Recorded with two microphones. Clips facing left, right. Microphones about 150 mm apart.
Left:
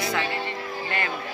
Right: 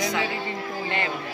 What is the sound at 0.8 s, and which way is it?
Speech, 25° right (ahead or behind).